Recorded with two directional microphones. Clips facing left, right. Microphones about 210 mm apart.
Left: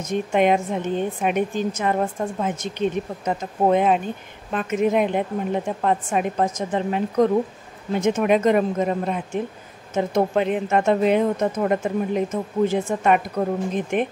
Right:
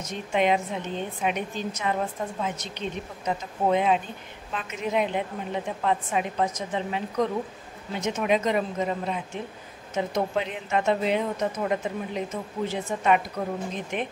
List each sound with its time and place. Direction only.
0.0 s a woman's voice: 50° left (ahead or behind)